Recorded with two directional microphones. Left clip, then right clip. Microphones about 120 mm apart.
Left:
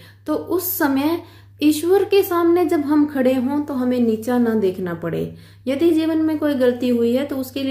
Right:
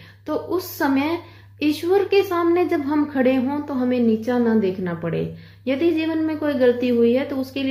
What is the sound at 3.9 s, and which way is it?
A woman's voice, 40° left (ahead or behind).